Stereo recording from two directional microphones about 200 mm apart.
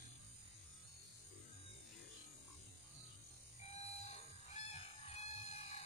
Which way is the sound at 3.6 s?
30° left (ahead or behind).